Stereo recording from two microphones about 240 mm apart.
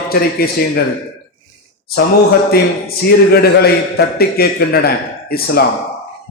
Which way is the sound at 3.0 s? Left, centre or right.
Left.